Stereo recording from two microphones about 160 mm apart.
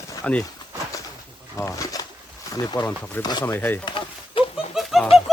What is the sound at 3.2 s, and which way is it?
Speech, 25° left (ahead or behind).